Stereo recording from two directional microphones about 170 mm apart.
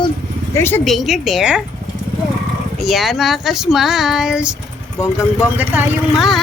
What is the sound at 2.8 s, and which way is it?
A child's voice, centre (ahead or behind).